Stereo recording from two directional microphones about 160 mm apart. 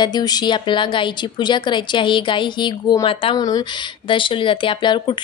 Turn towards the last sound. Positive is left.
turn(degrees=30)  # may be behind; listen again after turning